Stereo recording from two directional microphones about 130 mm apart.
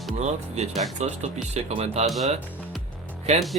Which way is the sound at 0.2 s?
60° right (ahead or behind).